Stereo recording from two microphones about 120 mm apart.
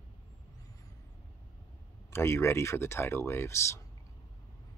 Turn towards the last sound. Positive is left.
turn(degrees=25)  # may be behind; listen again after turning